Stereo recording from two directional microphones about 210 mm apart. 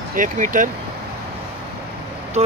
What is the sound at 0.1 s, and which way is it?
Speech, 40° right (ahead or behind).